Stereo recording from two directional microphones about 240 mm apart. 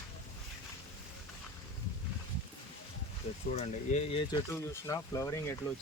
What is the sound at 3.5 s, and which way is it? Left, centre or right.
Speech, left.